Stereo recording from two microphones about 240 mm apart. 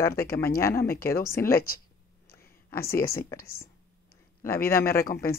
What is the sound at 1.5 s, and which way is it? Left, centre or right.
Speech, left.